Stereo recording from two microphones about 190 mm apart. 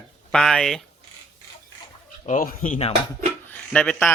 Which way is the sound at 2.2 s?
45° left (ahead or behind).